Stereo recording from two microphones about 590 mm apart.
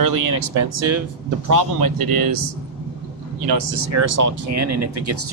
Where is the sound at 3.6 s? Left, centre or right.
Right.